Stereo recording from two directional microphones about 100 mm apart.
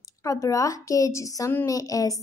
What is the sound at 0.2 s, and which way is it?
Speech, 35° left (ahead or behind).